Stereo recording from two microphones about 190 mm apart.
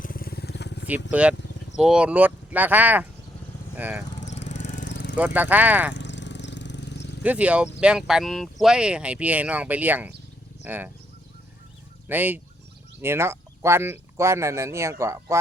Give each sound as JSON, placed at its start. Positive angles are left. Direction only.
{"t": 0.0, "sound": "vehicle", "side_deg": 50}
{"t": 1.1, "sound": "speech", "side_deg": -5}
{"t": 4.3, "sound": "lawn mower", "side_deg": 70}
{"t": 4.6, "sound": "lawn mower", "side_deg": 40}
{"t": 4.9, "sound": "vehicle", "side_deg": 70}
{"t": 5.1, "sound": "speech", "side_deg": -10}
{"t": 5.9, "sound": "jackhammer", "side_deg": 70}
{"t": 7.2, "sound": "speech", "side_deg": -5}
{"t": 12.0, "sound": "speech", "side_deg": -10}